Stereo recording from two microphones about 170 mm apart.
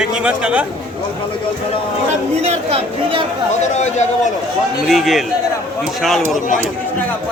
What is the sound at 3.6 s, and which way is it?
Speech, 45° left (ahead or behind).